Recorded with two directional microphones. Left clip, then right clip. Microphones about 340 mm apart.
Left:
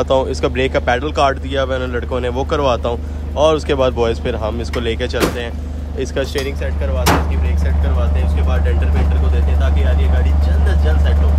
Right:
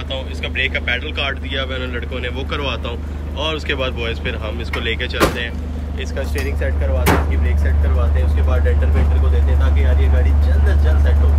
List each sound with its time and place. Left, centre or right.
0.3 s speech: centre
5.9 s speech: centre